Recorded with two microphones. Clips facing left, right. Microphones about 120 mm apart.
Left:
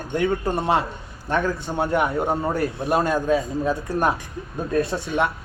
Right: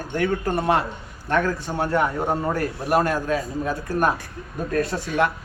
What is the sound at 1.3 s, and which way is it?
Speech, 15° left (ahead or behind).